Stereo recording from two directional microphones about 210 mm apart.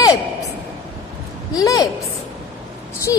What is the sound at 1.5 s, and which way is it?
Speech, 15° left (ahead or behind).